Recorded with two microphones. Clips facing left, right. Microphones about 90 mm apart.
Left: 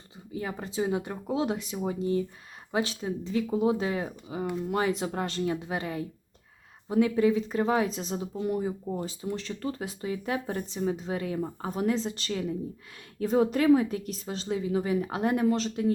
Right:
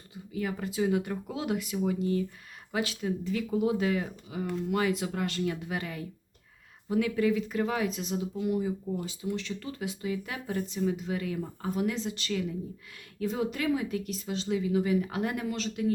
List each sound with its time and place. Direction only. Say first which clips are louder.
0.3 s speech: even; 30° left (ahead or behind)